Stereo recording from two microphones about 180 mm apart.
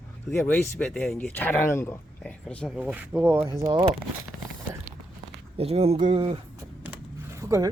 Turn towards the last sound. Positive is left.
turn(degrees=-20)  # may be behind; listen again after turning